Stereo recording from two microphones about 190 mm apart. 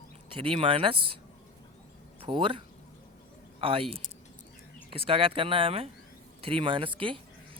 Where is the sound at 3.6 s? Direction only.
30° right (ahead or behind).